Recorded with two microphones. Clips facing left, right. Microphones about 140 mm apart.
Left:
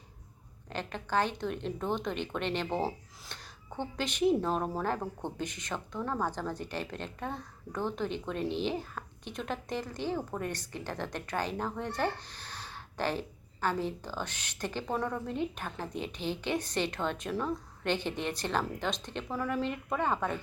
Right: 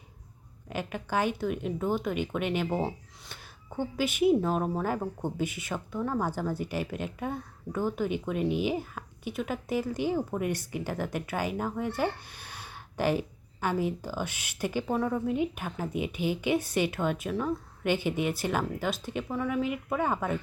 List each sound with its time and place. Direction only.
0.7 s speech: 10° right (ahead or behind)